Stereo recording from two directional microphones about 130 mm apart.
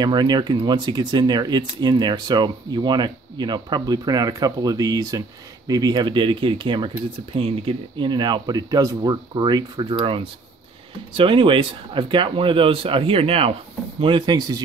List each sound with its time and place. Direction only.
0.0 s speech: 35° right (ahead or behind)